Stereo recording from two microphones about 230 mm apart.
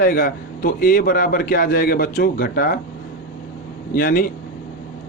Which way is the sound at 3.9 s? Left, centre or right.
Left.